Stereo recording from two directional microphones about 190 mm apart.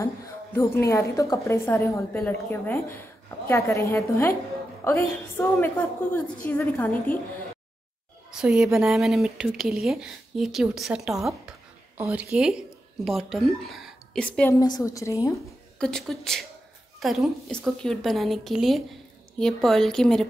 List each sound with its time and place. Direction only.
0.6 s a woman's voice: 15° left (ahead or behind)
8.3 s speech: 5° right (ahead or behind)
14.6 s a woman's voice: 20° left (ahead or behind)
15.8 s speech: centre (ahead or behind)